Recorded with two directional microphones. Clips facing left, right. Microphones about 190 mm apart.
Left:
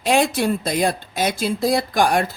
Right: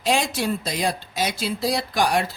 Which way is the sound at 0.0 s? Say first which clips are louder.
Left 5 dB; 55° left (ahead or behind).